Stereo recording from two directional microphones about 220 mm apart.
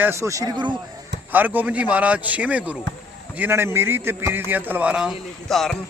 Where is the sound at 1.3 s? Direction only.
10° right (ahead or behind).